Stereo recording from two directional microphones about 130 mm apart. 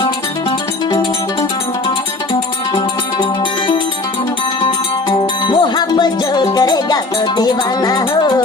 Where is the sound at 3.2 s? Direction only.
40° left (ahead or behind).